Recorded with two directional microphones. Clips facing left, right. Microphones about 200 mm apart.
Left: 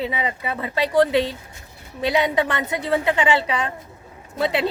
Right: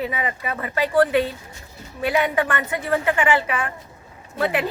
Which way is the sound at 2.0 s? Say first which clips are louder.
Left 1 dB; 15° left (ahead or behind).